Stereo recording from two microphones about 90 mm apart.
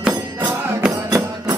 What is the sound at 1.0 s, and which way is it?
Music, 45° right (ahead or behind).